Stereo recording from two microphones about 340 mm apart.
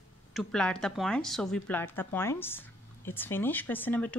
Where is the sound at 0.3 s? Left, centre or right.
Centre.